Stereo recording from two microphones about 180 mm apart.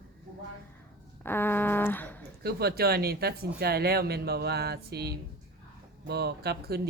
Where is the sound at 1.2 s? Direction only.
10° left (ahead or behind).